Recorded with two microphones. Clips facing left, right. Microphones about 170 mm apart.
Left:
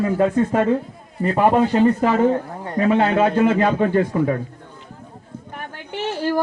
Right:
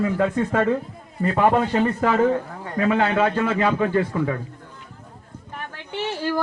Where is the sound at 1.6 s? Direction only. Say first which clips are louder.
Left 5 dB; 25° left (ahead or behind).